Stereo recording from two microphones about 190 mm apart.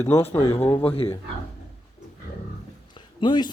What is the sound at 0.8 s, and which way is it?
Speech, 30° left (ahead or behind).